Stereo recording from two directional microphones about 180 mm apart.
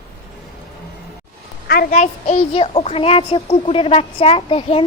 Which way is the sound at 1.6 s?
55° left (ahead or behind).